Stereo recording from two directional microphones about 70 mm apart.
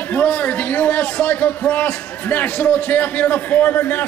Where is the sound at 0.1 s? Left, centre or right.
Left.